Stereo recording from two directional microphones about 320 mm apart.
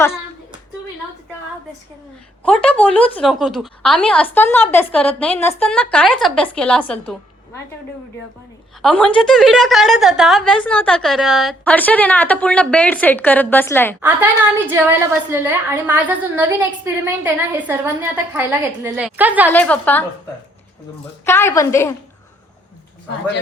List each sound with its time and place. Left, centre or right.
2.4 s a woman's voice: centre
8.8 s a woman's voice: centre
14.7 s a woman's voice: centre
21.2 s a woman's voice: centre